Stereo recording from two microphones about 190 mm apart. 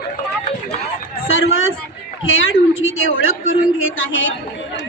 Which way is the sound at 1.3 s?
90° left.